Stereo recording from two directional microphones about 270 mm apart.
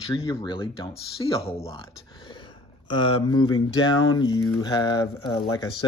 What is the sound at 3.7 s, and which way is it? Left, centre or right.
Speech, left.